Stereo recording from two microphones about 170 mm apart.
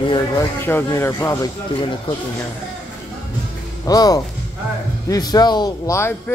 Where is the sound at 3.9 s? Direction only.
20° left (ahead or behind).